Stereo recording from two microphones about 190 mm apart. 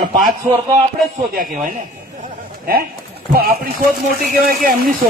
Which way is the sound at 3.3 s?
50° right (ahead or behind).